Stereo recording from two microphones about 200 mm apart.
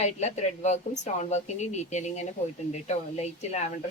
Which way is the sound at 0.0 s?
35° left (ahead or behind).